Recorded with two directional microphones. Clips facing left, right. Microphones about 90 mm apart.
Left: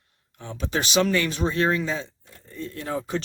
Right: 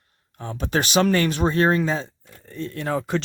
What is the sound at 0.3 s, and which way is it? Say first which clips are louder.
A man's voice: right 4 dB; 45° right (ahead or behind).